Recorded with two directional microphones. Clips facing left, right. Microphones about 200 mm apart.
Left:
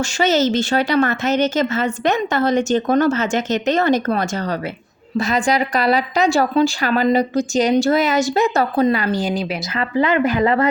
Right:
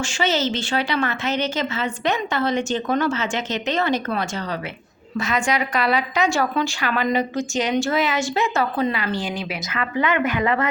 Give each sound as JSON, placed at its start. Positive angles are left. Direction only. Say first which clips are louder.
{"t": 0.0, "sound": "a woman's voice", "louder": "left 5 dB", "side_deg": 45}